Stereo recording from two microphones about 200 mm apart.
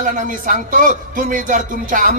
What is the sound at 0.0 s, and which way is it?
Speech, 40° right (ahead or behind).